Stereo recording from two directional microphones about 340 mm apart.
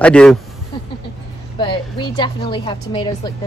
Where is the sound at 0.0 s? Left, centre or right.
Centre.